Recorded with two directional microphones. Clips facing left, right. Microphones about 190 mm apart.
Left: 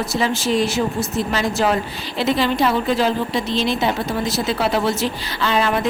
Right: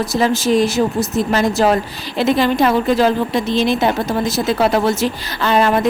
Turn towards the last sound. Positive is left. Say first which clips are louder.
# right 4 dB
turn(degrees=-45)  # may be behind; listen again after turning